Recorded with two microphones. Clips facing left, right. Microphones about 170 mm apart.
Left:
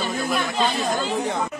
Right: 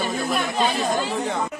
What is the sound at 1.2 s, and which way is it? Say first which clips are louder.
Speech: even; 15° left (ahead or behind).